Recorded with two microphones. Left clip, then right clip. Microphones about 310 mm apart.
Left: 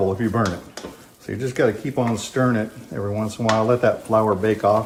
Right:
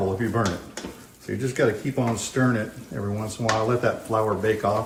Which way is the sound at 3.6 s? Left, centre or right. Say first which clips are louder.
Left 5 dB; left.